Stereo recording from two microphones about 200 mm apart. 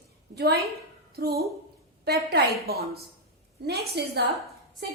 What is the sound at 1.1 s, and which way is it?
A woman's voice, 50° right (ahead or behind).